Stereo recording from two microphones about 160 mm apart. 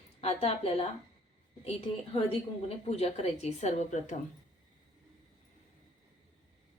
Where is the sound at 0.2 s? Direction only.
40° left (ahead or behind).